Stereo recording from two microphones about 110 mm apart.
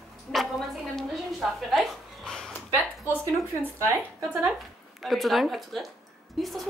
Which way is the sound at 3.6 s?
25° right (ahead or behind).